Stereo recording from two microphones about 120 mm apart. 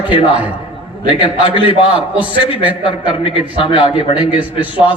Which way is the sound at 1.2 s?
45° left (ahead or behind).